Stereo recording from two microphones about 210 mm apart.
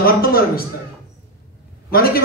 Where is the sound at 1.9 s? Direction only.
45° left (ahead or behind).